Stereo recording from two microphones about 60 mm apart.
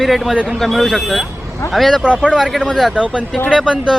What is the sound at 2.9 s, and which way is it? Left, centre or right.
A man's voice, centre.